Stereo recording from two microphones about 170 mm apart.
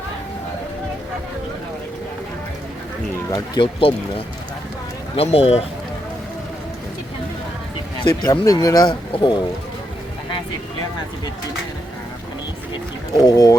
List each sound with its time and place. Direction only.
3.3 s speech: 25° left (ahead or behind)
5.1 s speech: 35° left (ahead or behind)
7.9 s speech: 20° left (ahead or behind)
13.1 s speech: 20° left (ahead or behind)